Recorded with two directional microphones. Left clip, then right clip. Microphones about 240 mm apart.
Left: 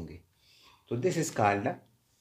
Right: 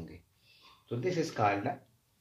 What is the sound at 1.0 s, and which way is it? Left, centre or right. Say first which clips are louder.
Speech: left 2 dB; left.